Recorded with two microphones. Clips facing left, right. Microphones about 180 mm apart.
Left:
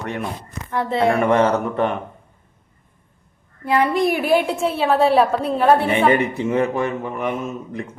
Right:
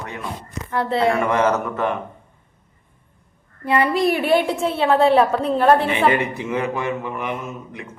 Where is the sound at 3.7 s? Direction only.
Centre (ahead or behind).